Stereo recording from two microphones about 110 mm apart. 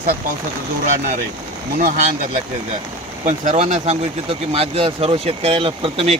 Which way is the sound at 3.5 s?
75° right (ahead or behind).